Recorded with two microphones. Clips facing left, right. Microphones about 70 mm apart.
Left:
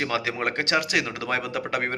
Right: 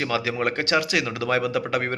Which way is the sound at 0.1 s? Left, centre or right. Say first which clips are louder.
Right 2 dB; left.